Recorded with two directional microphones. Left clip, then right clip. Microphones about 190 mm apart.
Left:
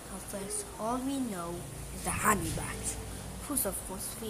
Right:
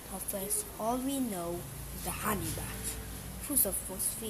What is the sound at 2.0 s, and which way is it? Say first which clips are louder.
Speech: left 6 dB; 5° left (ahead or behind).